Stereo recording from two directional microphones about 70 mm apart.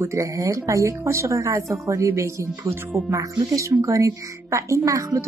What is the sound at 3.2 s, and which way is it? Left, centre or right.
Speech, right.